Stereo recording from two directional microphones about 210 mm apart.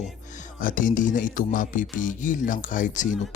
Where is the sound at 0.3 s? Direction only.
35° left (ahead or behind).